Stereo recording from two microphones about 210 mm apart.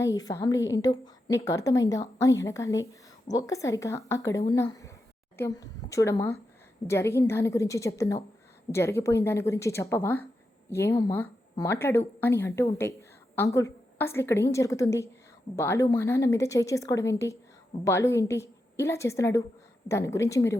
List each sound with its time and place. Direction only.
0.0 s a woman's voice: 15° left (ahead or behind)